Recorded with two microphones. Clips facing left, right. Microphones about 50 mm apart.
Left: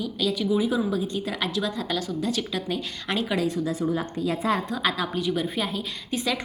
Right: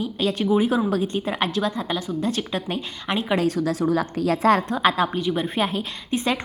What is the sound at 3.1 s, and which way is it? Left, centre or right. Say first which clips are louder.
Speech: right 2 dB; right.